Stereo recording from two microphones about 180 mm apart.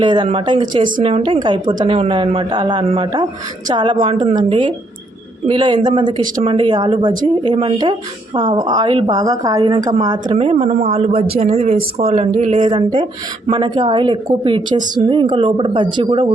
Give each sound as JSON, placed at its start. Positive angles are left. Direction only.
{"t": 0.0, "sound": "a woman's voice", "side_deg": -25}
{"t": 10.3, "sound": "speech", "side_deg": -35}
{"t": 12.7, "sound": "a woman's voice", "side_deg": -25}